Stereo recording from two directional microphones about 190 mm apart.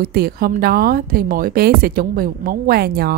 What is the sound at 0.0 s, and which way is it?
A woman's voice, 55° right (ahead or behind).